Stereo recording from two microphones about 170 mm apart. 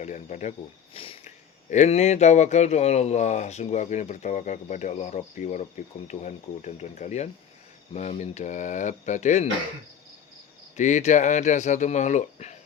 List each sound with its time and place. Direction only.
0.0 s speech: 45° left (ahead or behind)
0.9 s a sound: 35° left (ahead or behind)
1.7 s speech: 40° left (ahead or behind)
10.8 s speech: 45° left (ahead or behind)